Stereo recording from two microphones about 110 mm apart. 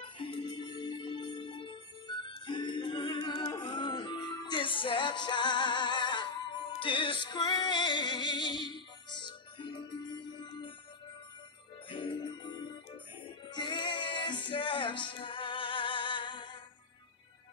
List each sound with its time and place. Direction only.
0.2 s music: 50° left (ahead or behind)
11.9 s music: 50° left (ahead or behind)